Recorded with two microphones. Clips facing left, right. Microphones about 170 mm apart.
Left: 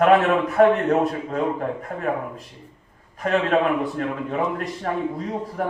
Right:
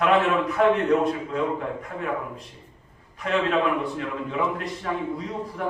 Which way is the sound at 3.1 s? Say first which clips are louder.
Left 3 dB; 45° left (ahead or behind).